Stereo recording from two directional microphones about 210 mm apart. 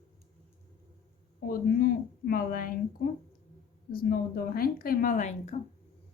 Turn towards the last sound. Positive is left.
turn(degrees=30)  # may be behind; listen again after turning